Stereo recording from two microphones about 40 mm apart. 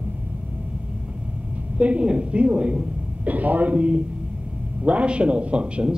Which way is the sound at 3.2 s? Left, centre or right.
Right.